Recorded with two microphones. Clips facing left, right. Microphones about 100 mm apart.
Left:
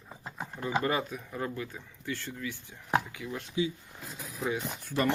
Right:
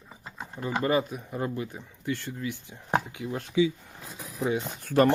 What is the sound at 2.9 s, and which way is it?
Speech, 30° right (ahead or behind).